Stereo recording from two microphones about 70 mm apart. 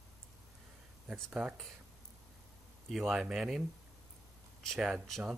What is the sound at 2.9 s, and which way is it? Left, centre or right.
Speech, centre.